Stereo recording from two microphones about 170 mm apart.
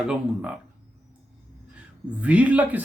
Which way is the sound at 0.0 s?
5° right (ahead or behind).